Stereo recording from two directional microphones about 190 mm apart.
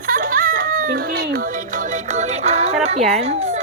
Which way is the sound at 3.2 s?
35° right (ahead or behind).